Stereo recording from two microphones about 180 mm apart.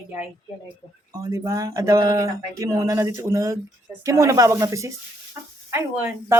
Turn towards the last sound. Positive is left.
turn(degrees=-10)  # may be behind; listen again after turning